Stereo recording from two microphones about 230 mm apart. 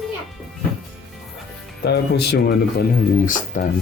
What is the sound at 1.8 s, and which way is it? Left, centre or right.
Speech, left.